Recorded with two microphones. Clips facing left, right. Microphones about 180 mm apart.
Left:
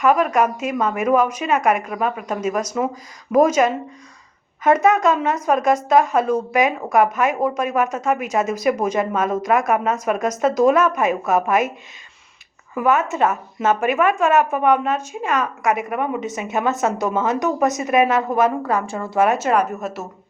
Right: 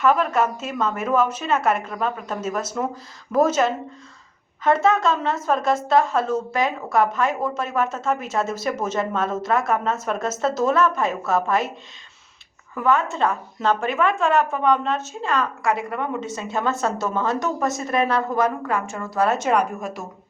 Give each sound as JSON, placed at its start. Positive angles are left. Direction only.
{"t": 0.0, "sound": "a woman's voice", "side_deg": 10}
{"t": 12.7, "sound": "a woman's voice", "side_deg": 15}
{"t": 19.4, "sound": "speech", "side_deg": 5}